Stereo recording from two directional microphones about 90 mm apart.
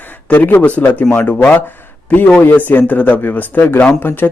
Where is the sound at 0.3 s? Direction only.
20° left (ahead or behind).